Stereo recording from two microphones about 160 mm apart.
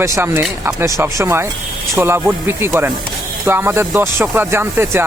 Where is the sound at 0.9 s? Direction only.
15° right (ahead or behind).